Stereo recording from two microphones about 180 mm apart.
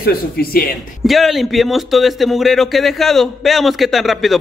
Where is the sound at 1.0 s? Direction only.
Centre (ahead or behind).